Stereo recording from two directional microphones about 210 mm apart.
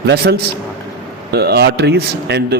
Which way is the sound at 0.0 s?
50° right (ahead or behind).